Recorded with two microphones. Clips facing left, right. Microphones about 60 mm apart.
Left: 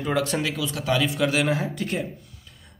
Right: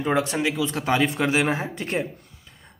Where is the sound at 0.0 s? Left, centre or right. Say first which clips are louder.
Right 2 dB; right.